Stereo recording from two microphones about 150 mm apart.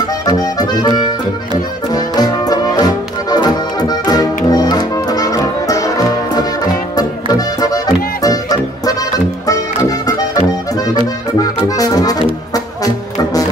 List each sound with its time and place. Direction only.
0.0 s accordion: 25° left (ahead or behind)
2.0 s music: 25° left (ahead or behind)
11.3 s accordion: 25° left (ahead or behind)
12.5 s music: 25° left (ahead or behind)